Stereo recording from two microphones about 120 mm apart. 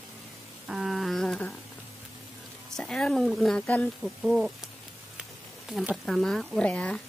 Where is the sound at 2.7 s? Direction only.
5° left (ahead or behind).